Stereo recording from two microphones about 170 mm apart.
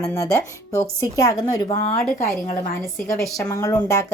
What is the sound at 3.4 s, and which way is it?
Speech, 20° left (ahead or behind).